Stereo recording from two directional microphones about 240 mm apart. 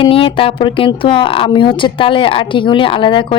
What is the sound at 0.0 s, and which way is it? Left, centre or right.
Speech, left.